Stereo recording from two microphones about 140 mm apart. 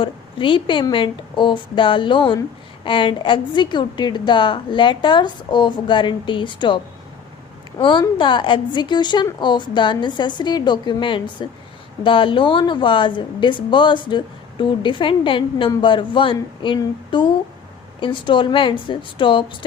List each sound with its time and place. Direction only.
0.0 s speech: 35° left (ahead or behind)